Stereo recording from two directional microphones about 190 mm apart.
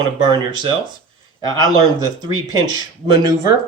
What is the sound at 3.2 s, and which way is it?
Speech, 20° right (ahead or behind).